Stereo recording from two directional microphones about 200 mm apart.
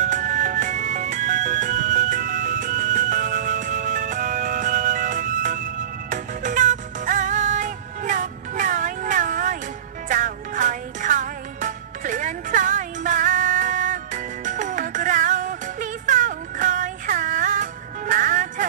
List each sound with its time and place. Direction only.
0.0 s music: 40° right (ahead or behind)